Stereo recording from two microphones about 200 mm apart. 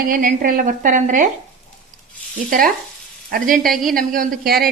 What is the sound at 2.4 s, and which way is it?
A woman's voice, 45° right (ahead or behind).